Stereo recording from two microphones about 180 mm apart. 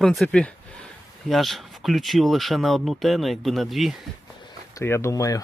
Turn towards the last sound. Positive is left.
turn(degrees=20)  # may be behind; listen again after turning